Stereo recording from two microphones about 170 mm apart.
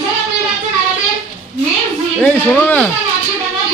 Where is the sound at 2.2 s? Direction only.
10° left (ahead or behind).